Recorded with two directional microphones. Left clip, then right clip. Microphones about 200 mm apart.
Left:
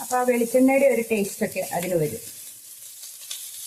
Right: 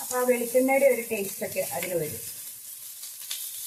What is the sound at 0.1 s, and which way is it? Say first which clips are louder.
Speech: left 3 dB; 50° left (ahead or behind).